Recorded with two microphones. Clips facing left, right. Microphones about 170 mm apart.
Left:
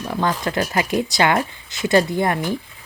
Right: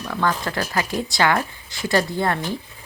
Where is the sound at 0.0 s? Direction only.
20° left (ahead or behind).